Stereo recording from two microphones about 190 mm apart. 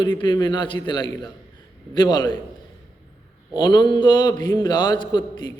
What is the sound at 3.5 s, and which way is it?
A man's voice, 20° left (ahead or behind).